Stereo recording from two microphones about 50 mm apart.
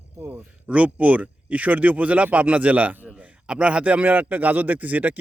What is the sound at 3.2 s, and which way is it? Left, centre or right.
A man's voice, right.